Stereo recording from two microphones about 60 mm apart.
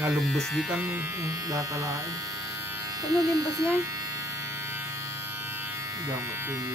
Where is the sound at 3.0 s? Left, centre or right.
Right.